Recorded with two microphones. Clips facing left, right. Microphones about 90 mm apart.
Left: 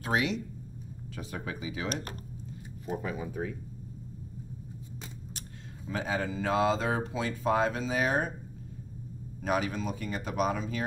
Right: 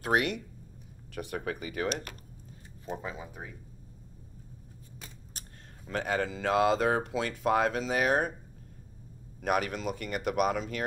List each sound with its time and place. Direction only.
0.1 s speech: 60° right (ahead or behind)
3.0 s speech: 15° right (ahead or behind)
5.9 s speech: 70° right (ahead or behind)
9.4 s speech: 65° right (ahead or behind)